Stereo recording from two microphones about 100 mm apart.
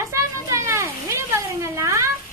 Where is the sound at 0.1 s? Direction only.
30° right (ahead or behind).